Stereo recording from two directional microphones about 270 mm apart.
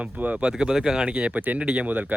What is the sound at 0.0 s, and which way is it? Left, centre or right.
Speech, centre.